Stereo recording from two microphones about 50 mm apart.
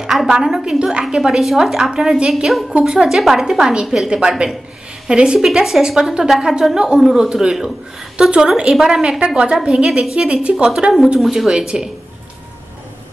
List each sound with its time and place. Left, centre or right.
0.0 s a woman's voice: centre